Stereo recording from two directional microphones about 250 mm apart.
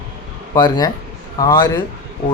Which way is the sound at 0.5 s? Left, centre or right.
Centre.